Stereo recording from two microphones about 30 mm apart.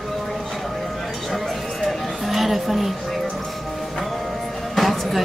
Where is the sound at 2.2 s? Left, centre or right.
Centre.